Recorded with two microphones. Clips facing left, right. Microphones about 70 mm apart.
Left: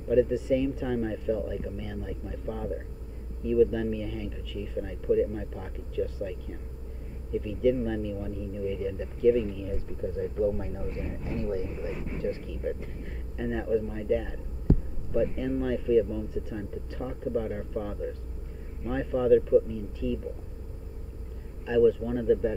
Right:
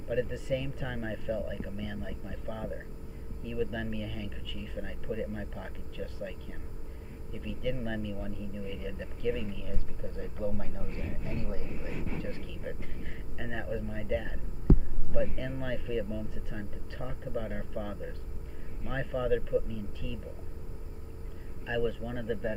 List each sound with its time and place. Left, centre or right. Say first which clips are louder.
0.1 s speech: left 8 dB; centre
7.4 s a man's voice: left 8 dB; centre
18.9 s a man's voice: left 8 dB; centre
21.6 s a man's voice: left 10 dB; centre